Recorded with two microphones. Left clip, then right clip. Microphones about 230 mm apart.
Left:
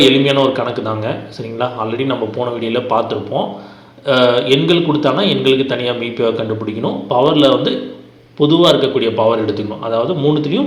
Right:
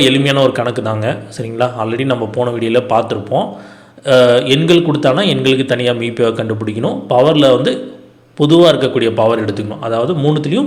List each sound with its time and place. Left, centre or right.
0.0 s a man's voice: right